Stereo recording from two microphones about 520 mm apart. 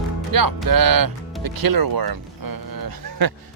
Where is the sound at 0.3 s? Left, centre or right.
Right.